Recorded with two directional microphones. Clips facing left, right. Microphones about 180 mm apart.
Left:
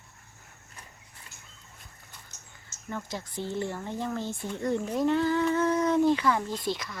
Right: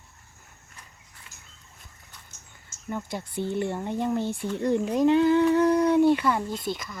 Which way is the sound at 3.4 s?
60° right (ahead or behind).